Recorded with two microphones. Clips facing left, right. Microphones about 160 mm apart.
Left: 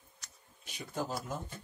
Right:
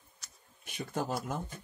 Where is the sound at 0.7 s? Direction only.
55° right (ahead or behind).